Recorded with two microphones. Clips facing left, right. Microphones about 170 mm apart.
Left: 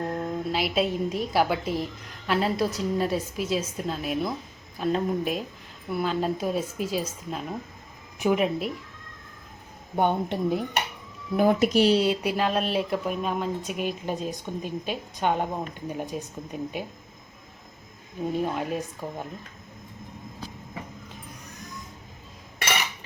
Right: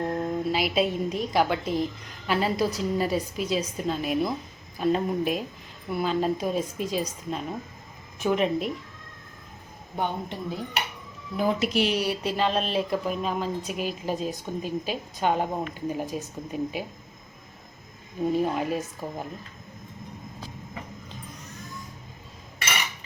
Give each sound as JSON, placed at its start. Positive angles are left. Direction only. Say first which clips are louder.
{"t": 0.1, "sound": "speech", "louder": "right 2 dB", "side_deg": -5}
{"t": 9.9, "sound": "a woman's voice", "louder": "left 6 dB", "side_deg": 55}
{"t": 11.7, "sound": "a woman's voice", "louder": "left 5 dB", "side_deg": 40}
{"t": 11.9, "sound": "speech", "louder": "left 3 dB", "side_deg": 20}
{"t": 18.4, "sound": "speech", "louder": "right 1 dB", "side_deg": -5}